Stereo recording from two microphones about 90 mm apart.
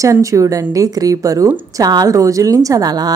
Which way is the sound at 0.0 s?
35° right (ahead or behind).